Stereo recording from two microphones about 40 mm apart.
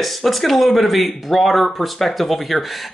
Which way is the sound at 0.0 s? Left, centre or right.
Centre.